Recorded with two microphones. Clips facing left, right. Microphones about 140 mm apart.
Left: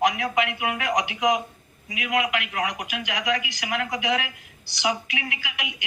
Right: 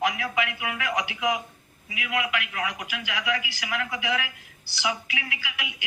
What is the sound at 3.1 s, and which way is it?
A woman's voice, 35° left (ahead or behind).